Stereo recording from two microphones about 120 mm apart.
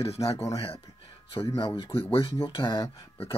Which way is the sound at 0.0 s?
55° left (ahead or behind).